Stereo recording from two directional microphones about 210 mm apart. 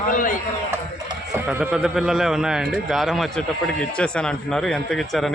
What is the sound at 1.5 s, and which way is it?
A man's voice, 5° right (ahead or behind).